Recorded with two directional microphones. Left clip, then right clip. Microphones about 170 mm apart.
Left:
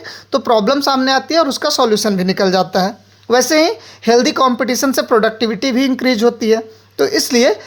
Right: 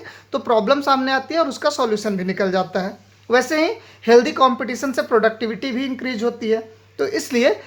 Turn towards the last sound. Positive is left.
turn(degrees=30)  # may be behind; listen again after turning